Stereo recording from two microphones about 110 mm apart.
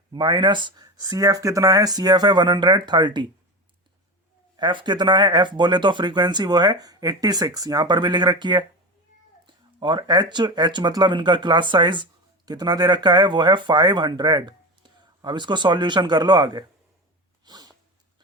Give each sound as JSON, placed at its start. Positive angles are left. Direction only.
{"t": 0.1, "sound": "speech", "side_deg": -45}
{"t": 4.5, "sound": "speech", "side_deg": -45}
{"t": 17.4, "sound": "sneeze", "side_deg": -40}